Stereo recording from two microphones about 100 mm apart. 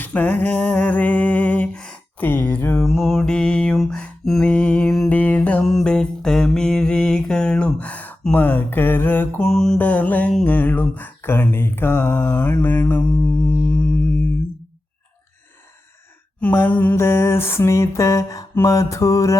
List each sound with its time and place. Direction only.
0.0 s a sound: 15° left (ahead or behind)
2.7 s mantra: 5° left (ahead or behind)
9.5 s mantra: 5° left (ahead or behind)
9.7 s mantra: 15° left (ahead or behind)
13.5 s music: 15° left (ahead or behind)
16.4 s mantra: 15° left (ahead or behind); by 19.4 s 35° left (ahead or behind)